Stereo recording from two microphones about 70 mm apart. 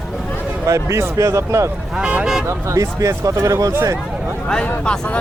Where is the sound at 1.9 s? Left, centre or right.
Centre.